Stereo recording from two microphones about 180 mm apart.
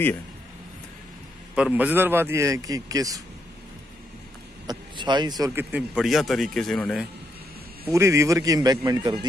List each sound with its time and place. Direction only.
1.5 s a man's voice: 5° right (ahead or behind)
4.6 s speech: 25° right (ahead or behind); by 7.1 s centre (ahead or behind)
7.8 s a man's voice: 15° right (ahead or behind)